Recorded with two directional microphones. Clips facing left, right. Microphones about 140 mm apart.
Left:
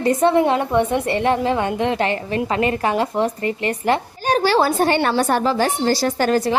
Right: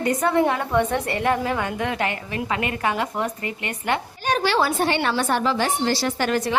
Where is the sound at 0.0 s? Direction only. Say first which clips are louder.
Left 4 dB; 30° left (ahead or behind).